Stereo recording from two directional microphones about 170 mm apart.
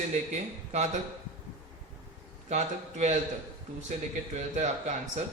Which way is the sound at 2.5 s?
45° right (ahead or behind).